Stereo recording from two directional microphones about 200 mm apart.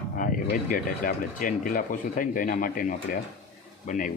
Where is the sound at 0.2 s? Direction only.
45° left (ahead or behind).